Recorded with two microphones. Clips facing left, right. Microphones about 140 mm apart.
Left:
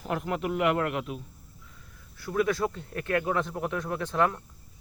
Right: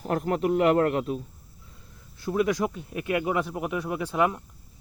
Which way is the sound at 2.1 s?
20° right (ahead or behind).